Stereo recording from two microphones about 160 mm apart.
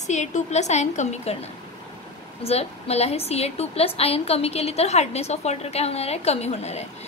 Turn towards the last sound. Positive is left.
turn(degrees=40)  # may be behind; listen again after turning